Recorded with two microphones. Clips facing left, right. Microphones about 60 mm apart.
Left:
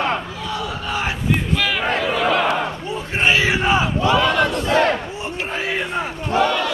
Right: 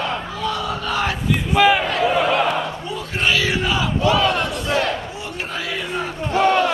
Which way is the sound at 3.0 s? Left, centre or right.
Left.